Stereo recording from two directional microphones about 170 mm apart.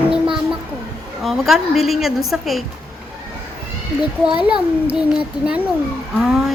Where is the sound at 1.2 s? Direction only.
Centre (ahead or behind).